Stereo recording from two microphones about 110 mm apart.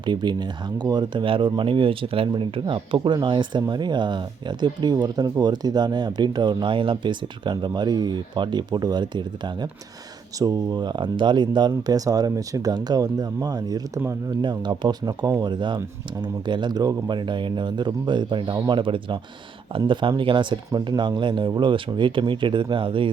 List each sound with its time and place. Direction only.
0.0 s speech: 45° right (ahead or behind)